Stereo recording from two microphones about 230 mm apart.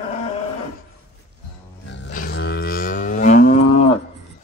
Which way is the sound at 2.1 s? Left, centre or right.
Left.